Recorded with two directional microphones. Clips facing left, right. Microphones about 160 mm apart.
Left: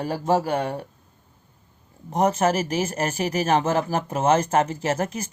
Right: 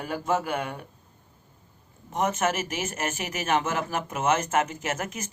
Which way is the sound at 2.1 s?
35° left (ahead or behind).